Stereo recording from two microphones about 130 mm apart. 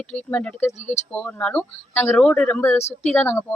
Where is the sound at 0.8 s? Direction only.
65° left (ahead or behind).